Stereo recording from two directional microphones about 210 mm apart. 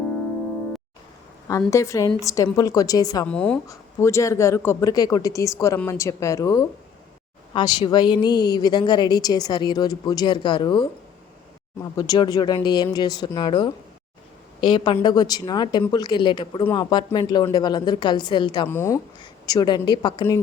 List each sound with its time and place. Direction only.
1.7 s speech: 15° left (ahead or behind)
3.2 s a woman's voice: 5° left (ahead or behind); by 10.8 s 20° left (ahead or behind)
11.9 s a woman's voice: 20° left (ahead or behind)